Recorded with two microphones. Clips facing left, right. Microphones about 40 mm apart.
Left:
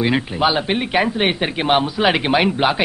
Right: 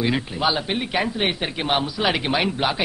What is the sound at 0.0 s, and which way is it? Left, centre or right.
A man's voice, left.